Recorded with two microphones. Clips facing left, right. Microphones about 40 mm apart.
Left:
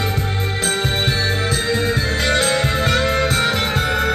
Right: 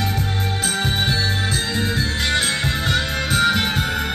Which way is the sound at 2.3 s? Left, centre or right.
Left.